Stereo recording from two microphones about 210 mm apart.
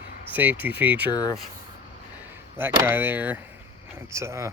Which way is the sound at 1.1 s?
15° left (ahead or behind).